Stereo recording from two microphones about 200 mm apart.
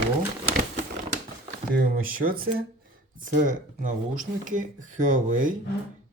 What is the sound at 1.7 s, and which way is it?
Speech, 45° right (ahead or behind).